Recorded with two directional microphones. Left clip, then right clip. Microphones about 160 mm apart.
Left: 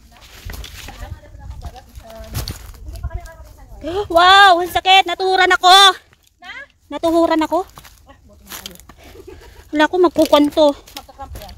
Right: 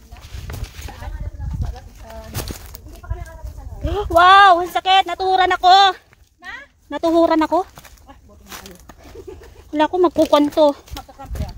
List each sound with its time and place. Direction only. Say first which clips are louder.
0.5 s walk: even; 20° left (ahead or behind)
1.6 s a sound: left 4 dB; 35° left (ahead or behind)
3.8 s speech: even; 25° left (ahead or behind)
6.9 s speech: even; 5° left (ahead or behind)
9.7 s speech: left 2 dB; 40° left (ahead or behind)
10.4 s speech: left 1 dB; 20° left (ahead or behind)